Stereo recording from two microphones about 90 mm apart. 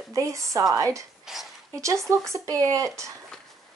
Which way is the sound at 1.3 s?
5° right (ahead or behind).